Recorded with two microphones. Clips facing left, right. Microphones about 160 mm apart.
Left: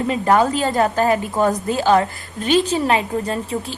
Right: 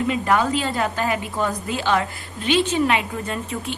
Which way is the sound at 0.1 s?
40° left (ahead or behind).